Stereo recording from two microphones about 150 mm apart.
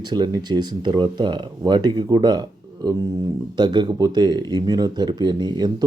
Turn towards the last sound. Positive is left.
turn(degrees=-25)  # may be behind; listen again after turning